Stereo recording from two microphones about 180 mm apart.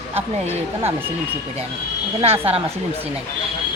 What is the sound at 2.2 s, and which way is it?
Speech, 35° right (ahead or behind).